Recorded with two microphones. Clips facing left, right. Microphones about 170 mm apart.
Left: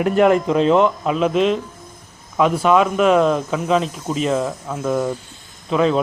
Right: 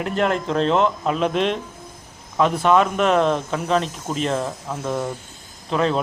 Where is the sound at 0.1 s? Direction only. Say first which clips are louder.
Left 7 dB; 5° left (ahead or behind).